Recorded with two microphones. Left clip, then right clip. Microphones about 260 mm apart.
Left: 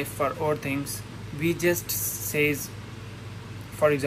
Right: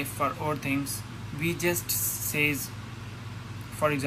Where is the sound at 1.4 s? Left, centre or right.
Centre.